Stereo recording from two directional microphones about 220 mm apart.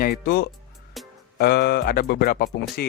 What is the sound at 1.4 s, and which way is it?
A man's voice, 45° left (ahead or behind).